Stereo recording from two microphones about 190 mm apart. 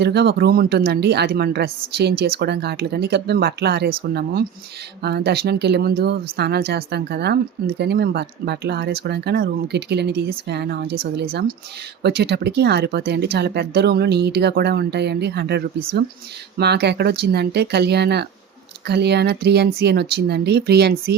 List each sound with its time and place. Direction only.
0.0 s speech: 60° right (ahead or behind)